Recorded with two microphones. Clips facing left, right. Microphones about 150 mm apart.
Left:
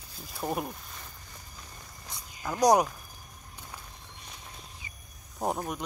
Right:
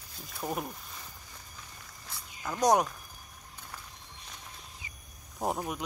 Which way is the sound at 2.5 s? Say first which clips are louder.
Left 3 dB; centre (ahead or behind).